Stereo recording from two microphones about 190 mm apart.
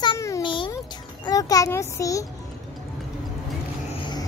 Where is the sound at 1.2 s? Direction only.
20° left (ahead or behind).